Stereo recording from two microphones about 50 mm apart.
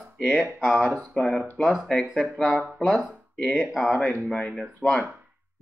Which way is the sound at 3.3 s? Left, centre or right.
Left.